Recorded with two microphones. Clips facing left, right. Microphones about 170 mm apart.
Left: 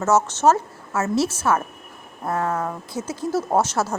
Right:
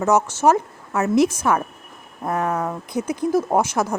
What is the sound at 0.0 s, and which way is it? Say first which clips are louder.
A woman's voice: right 1 dB; 15° right (ahead or behind).